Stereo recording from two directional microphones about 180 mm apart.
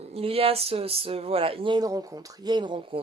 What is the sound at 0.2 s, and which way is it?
Speech, 30° right (ahead or behind).